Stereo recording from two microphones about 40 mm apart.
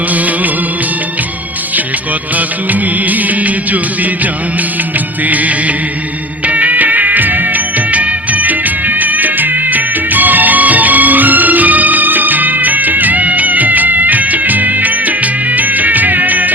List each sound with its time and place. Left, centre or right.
0.1 s music: right
2.3 s music: right
5.2 s music: right